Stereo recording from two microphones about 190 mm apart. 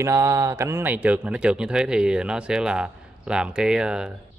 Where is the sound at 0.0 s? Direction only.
15° right (ahead or behind).